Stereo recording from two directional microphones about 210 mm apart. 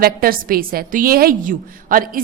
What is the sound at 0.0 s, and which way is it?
A woman's voice, 45° right (ahead or behind).